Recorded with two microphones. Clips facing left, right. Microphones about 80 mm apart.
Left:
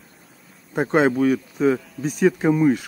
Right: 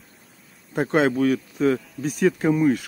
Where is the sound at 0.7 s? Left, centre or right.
Centre.